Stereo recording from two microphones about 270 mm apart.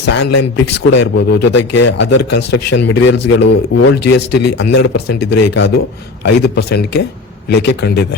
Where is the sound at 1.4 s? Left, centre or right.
Left.